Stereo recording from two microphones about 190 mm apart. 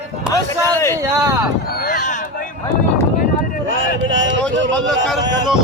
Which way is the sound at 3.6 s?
85° right.